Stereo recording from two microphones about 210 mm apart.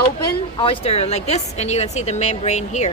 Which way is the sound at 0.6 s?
30° left (ahead or behind).